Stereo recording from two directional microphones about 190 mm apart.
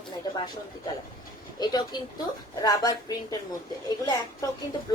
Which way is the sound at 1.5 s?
20° left (ahead or behind).